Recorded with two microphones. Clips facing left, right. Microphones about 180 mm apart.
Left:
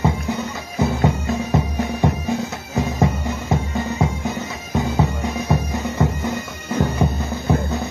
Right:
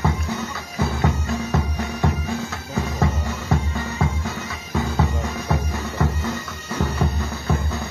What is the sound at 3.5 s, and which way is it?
Music, 20° left (ahead or behind).